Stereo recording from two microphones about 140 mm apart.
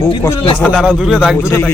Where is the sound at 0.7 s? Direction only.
5° right (ahead or behind).